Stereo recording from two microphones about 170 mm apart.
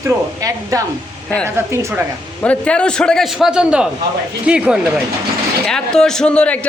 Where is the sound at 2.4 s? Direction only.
5° left (ahead or behind).